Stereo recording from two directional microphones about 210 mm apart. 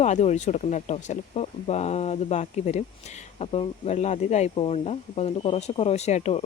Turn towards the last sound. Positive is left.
turn(degrees=30)  # may be behind; listen again after turning